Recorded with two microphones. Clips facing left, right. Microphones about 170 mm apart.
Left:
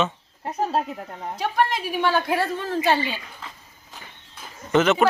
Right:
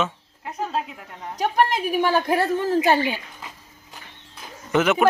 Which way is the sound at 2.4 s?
15° right (ahead or behind).